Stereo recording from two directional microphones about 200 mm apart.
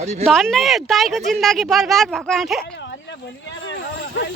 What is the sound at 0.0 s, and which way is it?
Speech, 35° right (ahead or behind).